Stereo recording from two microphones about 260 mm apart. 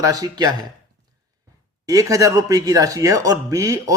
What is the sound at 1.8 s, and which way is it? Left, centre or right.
Speech, centre.